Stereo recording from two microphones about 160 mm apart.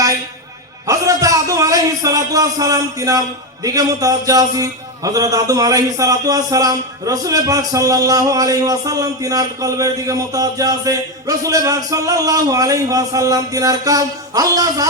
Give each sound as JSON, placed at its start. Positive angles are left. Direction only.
{"t": 0.9, "sound": "a man's voice", "side_deg": -20}